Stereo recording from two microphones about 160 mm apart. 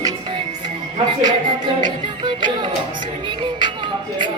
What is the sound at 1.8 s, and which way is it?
Music, 30° right (ahead or behind).